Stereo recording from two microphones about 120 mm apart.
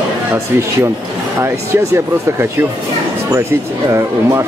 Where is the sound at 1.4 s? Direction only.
20° right (ahead or behind).